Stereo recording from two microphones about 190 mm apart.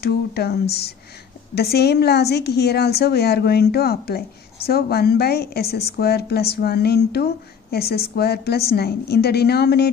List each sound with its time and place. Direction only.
0.0 s a woman's voice: 55° left (ahead or behind)